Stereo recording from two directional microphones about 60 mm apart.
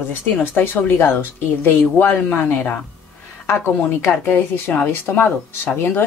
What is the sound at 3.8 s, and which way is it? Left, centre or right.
Speech, left.